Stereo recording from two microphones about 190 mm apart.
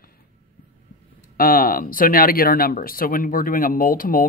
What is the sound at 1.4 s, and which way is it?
Speech, 50° left (ahead or behind).